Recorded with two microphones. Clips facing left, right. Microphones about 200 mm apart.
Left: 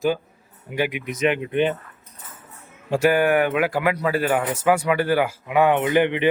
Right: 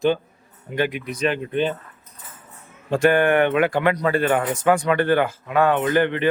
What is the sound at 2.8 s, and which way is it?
Speech, 10° left (ahead or behind).